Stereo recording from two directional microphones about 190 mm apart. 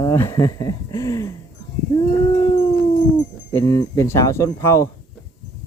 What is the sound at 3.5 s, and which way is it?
Speech, 15° left (ahead or behind).